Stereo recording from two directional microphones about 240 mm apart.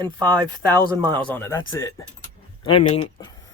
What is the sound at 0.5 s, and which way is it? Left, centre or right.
Speech, centre.